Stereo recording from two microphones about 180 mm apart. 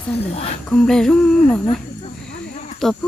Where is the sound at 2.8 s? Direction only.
Centre (ahead or behind).